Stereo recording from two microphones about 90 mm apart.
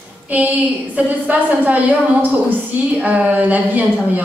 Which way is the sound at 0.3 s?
15° right (ahead or behind).